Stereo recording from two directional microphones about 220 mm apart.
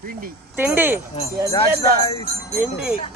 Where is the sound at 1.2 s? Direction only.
25° left (ahead or behind).